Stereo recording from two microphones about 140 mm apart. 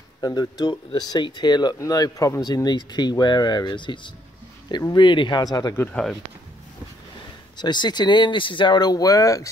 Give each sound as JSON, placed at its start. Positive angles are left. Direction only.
{"t": 0.2, "sound": "speech", "side_deg": 30}
{"t": 7.5, "sound": "speech", "side_deg": 30}